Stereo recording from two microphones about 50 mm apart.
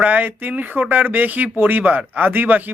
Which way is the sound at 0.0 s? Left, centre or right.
Right.